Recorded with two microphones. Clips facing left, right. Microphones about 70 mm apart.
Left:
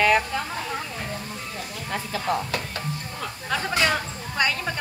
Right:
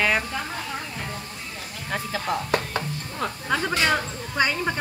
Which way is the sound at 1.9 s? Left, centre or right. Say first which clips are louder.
Left 1 dB; centre.